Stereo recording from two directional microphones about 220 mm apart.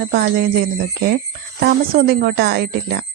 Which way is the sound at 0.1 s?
45° right (ahead or behind).